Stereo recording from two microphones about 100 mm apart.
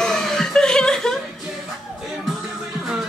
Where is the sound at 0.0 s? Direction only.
5° left (ahead or behind).